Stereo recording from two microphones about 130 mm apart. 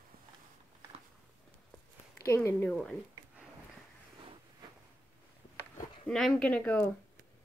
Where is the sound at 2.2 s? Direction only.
20° left (ahead or behind).